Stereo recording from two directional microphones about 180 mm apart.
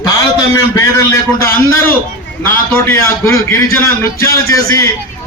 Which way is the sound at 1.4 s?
15° left (ahead or behind).